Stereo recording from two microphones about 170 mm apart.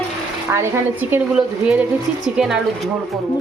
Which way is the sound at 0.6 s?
10° right (ahead or behind).